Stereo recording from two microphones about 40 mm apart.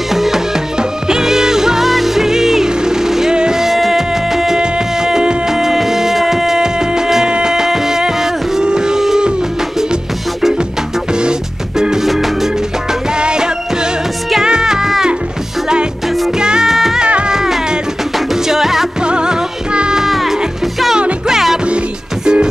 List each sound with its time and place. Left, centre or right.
0.1 s music: centre
11.8 s music: centre
13.2 s music: right
16.3 s music: centre
16.7 s music: centre
19.0 s music: right
20.0 s music: centre
22.2 s music: centre